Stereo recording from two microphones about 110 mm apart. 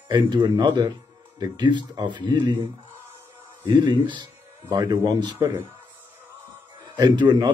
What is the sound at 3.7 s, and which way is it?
Speech, 45° right (ahead or behind).